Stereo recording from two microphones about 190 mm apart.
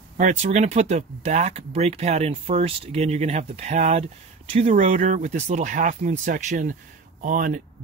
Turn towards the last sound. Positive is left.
turn(degrees=-45)  # may be behind; listen again after turning